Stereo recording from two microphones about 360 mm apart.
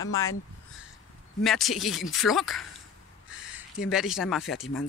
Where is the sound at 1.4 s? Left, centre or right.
Centre.